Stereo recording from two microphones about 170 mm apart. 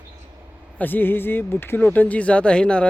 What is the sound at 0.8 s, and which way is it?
Speech, 10° left (ahead or behind).